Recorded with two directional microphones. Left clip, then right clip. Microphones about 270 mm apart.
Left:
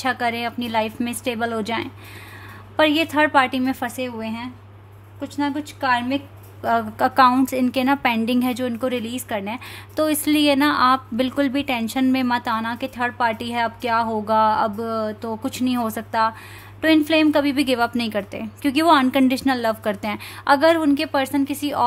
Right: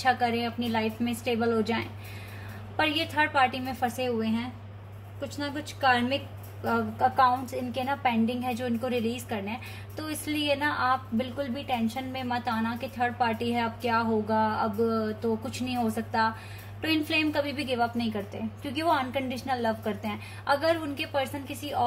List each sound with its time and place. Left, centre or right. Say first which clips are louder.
0.1 s a woman's voice: left 4 dB; left
6.6 s a woman's voice: left 6 dB; left